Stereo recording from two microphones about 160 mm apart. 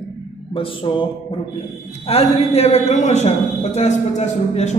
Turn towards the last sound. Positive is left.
turn(degrees=45)  # may be behind; listen again after turning